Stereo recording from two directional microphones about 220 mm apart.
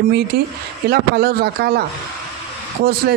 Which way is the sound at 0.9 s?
45° right (ahead or behind).